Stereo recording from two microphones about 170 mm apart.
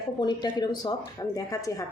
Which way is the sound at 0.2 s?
25° left (ahead or behind).